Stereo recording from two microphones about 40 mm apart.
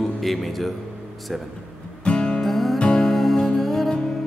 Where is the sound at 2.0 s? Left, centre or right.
Left.